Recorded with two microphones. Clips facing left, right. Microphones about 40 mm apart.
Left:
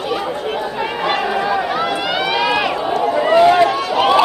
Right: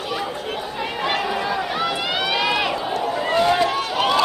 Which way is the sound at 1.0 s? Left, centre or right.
Centre.